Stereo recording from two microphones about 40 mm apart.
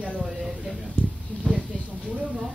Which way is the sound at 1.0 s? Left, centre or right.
Left.